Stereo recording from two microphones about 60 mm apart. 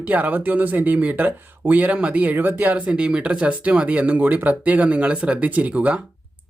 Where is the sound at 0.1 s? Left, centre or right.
Right.